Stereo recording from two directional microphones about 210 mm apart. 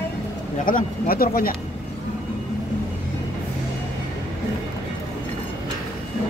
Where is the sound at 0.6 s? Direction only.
45° left (ahead or behind).